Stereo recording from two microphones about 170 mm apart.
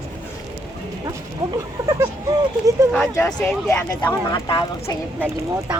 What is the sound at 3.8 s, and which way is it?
Speech, 15° left (ahead or behind).